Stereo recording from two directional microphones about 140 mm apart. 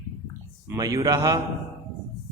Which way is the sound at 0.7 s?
25° right (ahead or behind).